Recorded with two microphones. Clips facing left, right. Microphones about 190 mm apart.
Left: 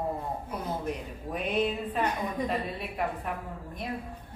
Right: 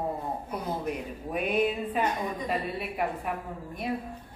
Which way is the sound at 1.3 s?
5° right (ahead or behind).